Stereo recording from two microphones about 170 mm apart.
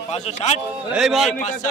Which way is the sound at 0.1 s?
40° left (ahead or behind).